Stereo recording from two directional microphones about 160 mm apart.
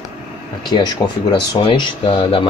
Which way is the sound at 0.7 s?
25° left (ahead or behind).